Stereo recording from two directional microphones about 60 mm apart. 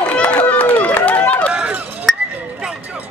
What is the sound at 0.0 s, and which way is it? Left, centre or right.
Run, left.